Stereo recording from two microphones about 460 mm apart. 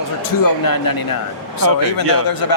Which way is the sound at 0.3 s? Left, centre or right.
Left.